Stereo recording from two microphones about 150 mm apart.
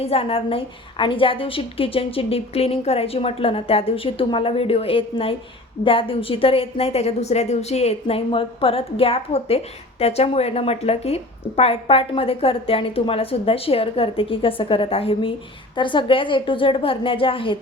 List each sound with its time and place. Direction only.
0.0 s a woman's voice: 40° left (ahead or behind)